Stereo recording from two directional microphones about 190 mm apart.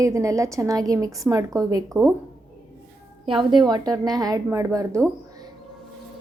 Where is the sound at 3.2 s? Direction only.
25° right (ahead or behind).